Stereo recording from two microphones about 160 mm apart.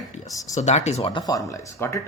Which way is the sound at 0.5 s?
45° left (ahead or behind).